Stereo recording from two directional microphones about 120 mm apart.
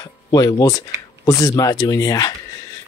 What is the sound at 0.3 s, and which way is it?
Speech, 30° left (ahead or behind).